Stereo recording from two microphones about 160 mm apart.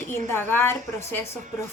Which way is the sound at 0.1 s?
15° left (ahead or behind).